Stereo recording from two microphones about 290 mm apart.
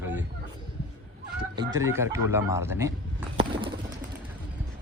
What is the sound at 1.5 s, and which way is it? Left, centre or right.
A man's voice, centre.